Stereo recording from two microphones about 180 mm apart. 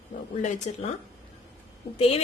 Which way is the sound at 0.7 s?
40° left (ahead or behind).